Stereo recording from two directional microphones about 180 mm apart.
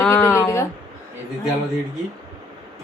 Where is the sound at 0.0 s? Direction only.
15° left (ahead or behind).